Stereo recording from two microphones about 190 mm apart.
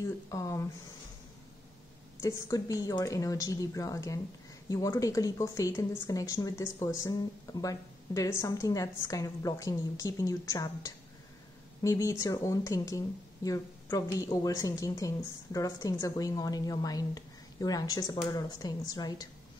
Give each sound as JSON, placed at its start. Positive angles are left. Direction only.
{"t": 0.3, "sound": "speech", "side_deg": 15}
{"t": 2.4, "sound": "speech", "side_deg": 15}